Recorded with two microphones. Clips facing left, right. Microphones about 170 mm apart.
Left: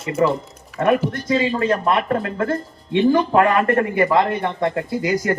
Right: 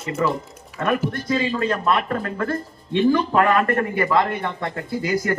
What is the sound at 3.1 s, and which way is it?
Speech, 45° left (ahead or behind).